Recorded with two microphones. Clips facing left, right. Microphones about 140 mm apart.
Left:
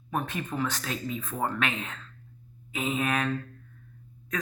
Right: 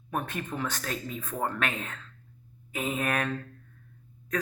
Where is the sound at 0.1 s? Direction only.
55° right (ahead or behind).